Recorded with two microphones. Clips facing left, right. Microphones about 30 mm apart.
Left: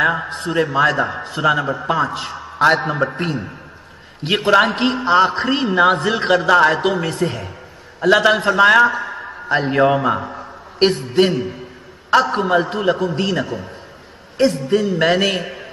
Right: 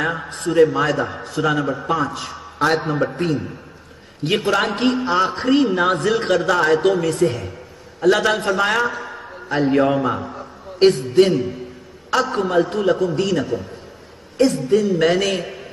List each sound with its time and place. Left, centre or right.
0.0 s a man's voice: centre
3.1 s a man's voice: left
14.8 s a man's voice: centre